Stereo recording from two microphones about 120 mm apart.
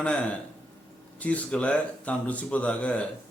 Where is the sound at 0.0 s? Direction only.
10° left (ahead or behind).